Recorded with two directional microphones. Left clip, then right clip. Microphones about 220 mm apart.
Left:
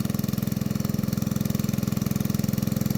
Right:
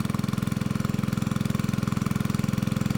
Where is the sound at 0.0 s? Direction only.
5° right (ahead or behind).